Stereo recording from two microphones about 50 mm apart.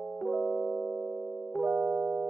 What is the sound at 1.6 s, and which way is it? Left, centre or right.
Music, centre.